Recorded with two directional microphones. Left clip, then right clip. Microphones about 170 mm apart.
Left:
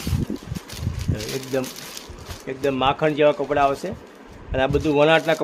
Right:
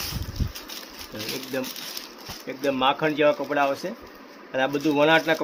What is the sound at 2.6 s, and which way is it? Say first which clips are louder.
Speech: left 2 dB; 50° left (ahead or behind).